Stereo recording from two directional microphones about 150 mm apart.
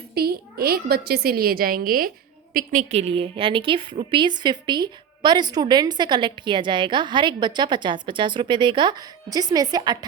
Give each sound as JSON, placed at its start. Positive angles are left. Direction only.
{"t": 0.1, "sound": "a woman's voice", "side_deg": -90}
{"t": 2.9, "sound": "a woman's voice", "side_deg": -40}